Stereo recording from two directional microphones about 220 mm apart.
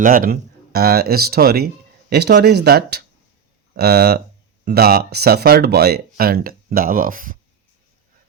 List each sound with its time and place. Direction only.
0.0 s speech: 40° right (ahead or behind)